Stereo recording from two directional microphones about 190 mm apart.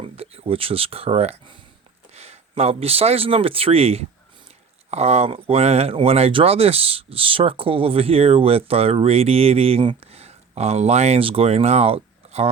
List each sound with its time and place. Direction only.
0.0 s speech: 30° right (ahead or behind)